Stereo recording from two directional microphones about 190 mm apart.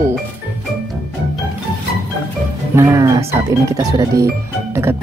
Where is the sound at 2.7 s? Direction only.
15° right (ahead or behind).